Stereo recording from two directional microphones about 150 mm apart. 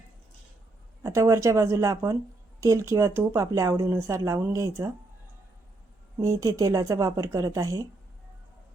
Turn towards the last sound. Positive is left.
turn(degrees=-20)  # may be behind; listen again after turning